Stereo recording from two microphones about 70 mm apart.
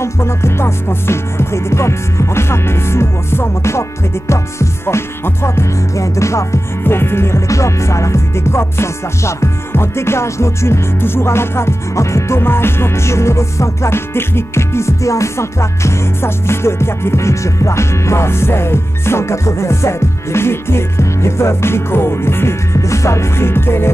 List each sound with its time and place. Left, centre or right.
0.0 s music: left
6.8 s music: left